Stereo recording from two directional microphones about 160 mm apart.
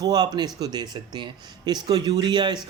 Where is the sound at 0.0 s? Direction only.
25° right (ahead or behind).